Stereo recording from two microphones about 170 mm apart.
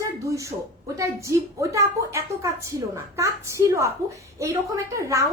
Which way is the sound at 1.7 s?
15° right (ahead or behind).